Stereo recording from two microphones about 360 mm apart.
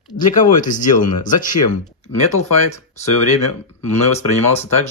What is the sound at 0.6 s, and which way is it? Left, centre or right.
Speech, left.